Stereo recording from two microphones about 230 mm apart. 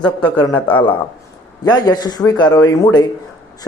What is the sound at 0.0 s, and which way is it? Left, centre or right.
A man's voice, centre.